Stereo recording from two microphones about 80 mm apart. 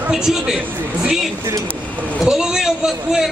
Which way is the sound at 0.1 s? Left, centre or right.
Centre.